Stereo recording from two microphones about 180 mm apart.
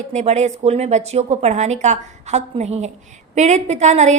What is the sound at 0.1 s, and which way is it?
A woman's voice, 40° right (ahead or behind).